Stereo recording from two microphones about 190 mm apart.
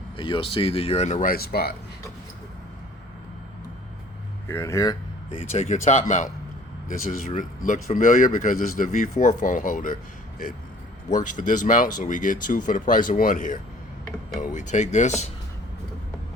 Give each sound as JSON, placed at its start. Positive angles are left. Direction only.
{"t": 0.2, "sound": "speech", "side_deg": 25}
{"t": 4.4, "sound": "speech", "side_deg": 15}